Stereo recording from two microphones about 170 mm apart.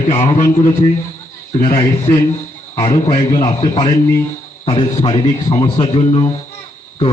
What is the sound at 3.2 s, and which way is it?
A man's voice, 25° left (ahead or behind).